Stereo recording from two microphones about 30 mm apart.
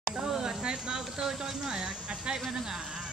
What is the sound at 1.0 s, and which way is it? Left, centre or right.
Music, centre.